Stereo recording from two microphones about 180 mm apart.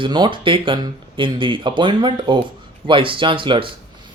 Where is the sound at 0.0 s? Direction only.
25° right (ahead or behind).